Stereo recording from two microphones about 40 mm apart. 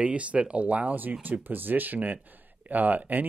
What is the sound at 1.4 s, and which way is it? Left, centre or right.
Speech, right.